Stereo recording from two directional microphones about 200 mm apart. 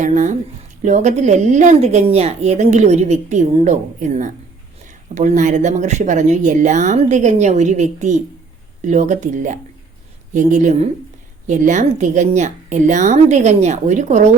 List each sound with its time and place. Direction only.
0.0 s a woman's voice: 40° right (ahead or behind)